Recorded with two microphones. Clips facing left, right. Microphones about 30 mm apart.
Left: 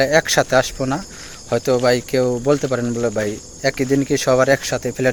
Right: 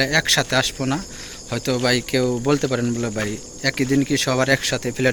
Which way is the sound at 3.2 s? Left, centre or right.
Right.